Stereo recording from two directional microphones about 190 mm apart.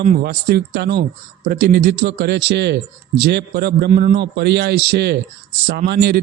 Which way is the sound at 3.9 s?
40° right (ahead or behind).